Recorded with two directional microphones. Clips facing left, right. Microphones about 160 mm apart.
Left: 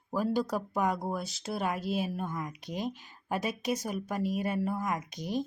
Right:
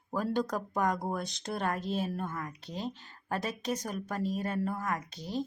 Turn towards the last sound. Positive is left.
turn(degrees=15)  # may be behind; listen again after turning